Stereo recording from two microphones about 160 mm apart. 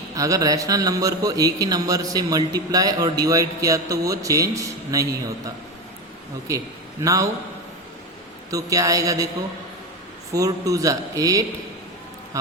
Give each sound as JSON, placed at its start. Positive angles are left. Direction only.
{"t": 0.2, "sound": "a man's voice", "side_deg": -20}
{"t": 7.0, "sound": "a man's voice", "side_deg": -20}
{"t": 8.4, "sound": "a man's voice", "side_deg": -20}
{"t": 10.3, "sound": "a man's voice", "side_deg": -20}